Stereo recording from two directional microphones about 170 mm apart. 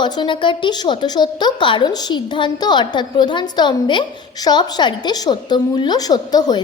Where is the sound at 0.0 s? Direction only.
25° left (ahead or behind).